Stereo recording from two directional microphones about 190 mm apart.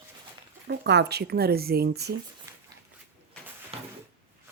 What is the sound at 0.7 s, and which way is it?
Speech, 60° right (ahead or behind).